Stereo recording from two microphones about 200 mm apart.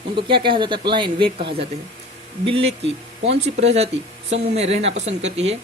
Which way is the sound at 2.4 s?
30° right (ahead or behind).